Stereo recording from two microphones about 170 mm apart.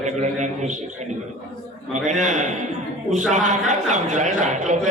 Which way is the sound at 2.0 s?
45° right (ahead or behind).